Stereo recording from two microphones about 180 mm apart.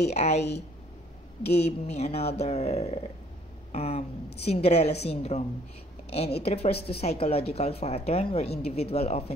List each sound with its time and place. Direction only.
0.1 s speech: 35° left (ahead or behind)
0.4 s speech: 70° left (ahead or behind)
1.4 s a woman's voice: 35° left (ahead or behind)
6.4 s a woman's voice: 35° left (ahead or behind)